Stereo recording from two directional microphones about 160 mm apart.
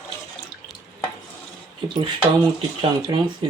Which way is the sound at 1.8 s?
30° right (ahead or behind).